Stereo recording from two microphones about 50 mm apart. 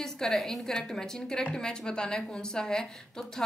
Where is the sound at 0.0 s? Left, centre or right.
Centre.